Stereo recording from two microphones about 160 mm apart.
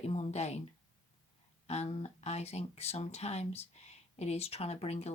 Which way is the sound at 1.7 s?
45° left (ahead or behind).